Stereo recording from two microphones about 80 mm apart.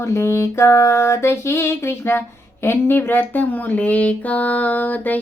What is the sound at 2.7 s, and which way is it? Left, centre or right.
Speech, left.